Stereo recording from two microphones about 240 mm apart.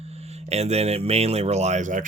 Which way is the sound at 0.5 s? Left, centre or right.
Right.